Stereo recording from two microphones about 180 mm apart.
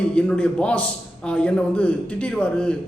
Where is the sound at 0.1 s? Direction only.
5° left (ahead or behind).